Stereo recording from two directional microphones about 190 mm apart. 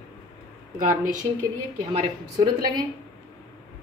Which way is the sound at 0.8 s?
40° right (ahead or behind).